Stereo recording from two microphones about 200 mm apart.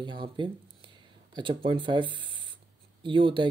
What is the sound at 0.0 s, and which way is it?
Speech, 25° right (ahead or behind).